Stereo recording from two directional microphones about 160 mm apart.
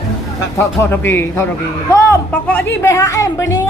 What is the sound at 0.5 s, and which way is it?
Speech, 15° left (ahead or behind).